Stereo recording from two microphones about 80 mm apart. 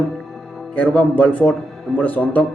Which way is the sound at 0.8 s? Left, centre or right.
Centre.